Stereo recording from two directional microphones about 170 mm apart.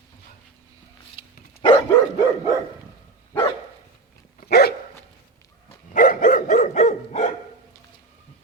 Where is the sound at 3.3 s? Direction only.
20° left (ahead or behind).